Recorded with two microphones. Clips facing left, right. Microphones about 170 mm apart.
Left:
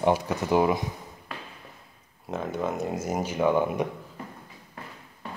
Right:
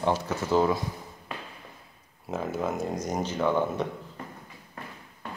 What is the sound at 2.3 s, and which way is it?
Speech, 5° right (ahead or behind).